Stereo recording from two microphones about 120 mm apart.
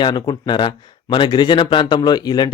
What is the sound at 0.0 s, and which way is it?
Speech, 40° left (ahead or behind).